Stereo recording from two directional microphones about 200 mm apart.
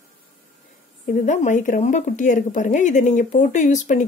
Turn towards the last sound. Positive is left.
turn(degrees=35)  # may be behind; listen again after turning